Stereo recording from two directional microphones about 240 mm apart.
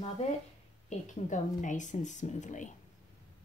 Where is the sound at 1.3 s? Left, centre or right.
Left.